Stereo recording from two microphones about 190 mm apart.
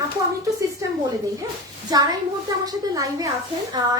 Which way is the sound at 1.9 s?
20° right (ahead or behind).